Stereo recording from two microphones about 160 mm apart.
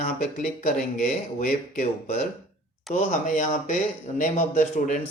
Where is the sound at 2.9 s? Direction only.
55° left (ahead or behind).